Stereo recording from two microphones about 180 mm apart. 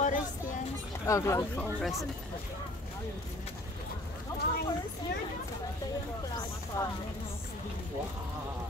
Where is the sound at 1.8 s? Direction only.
Centre (ahead or behind).